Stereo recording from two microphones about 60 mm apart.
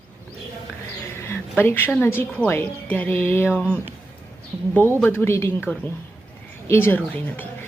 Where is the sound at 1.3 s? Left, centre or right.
Left.